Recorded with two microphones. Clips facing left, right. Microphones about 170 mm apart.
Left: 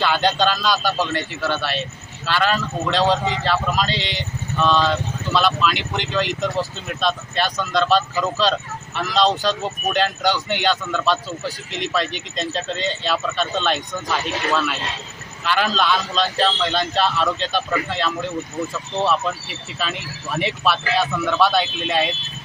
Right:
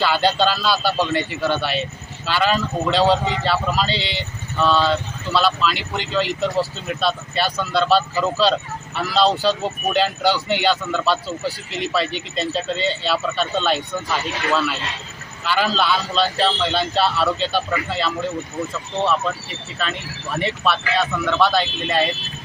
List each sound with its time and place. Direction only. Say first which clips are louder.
0.0 s speech: right 1 dB; 5° right (ahead or behind)
15.4 s speech: even; 5° right (ahead or behind)
19.8 s speech: right 1 dB; centre (ahead or behind)